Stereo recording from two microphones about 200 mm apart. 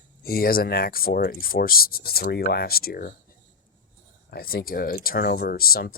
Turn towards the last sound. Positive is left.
turn(degrees=50)  # may be behind; listen again after turning